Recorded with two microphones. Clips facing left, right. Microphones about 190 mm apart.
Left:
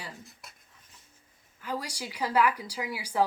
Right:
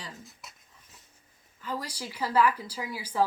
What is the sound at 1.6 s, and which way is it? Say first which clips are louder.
Speech: even; 10° left (ahead or behind).